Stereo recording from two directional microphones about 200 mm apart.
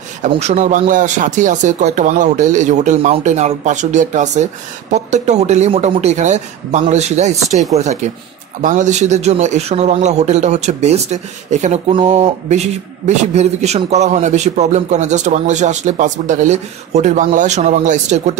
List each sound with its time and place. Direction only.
0.3 s a man's voice: 35° right (ahead or behind)